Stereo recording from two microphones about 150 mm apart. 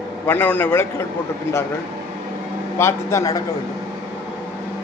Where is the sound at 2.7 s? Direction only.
20° left (ahead or behind).